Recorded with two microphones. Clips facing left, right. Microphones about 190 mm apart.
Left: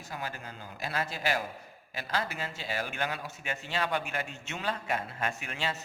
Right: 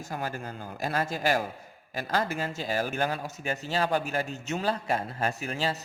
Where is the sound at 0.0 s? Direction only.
45° right (ahead or behind).